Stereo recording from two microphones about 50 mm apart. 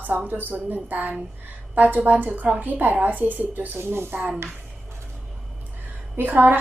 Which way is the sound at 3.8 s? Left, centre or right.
Right.